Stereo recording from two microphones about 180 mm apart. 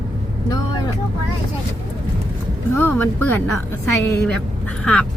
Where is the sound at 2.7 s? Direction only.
10° left (ahead or behind).